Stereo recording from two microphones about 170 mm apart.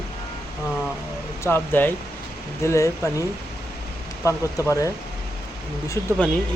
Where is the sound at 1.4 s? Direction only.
15° left (ahead or behind).